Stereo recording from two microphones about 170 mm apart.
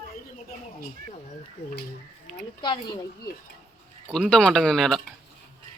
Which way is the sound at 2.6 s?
30° left (ahead or behind).